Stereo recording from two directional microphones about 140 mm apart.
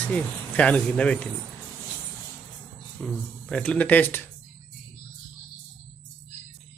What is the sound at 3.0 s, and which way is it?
Speech, 5° left (ahead or behind).